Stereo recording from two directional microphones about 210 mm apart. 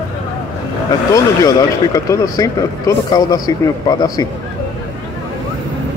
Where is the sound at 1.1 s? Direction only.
15° left (ahead or behind).